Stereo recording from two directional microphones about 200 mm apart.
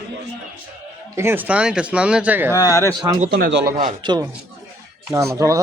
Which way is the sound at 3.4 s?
60° right (ahead or behind).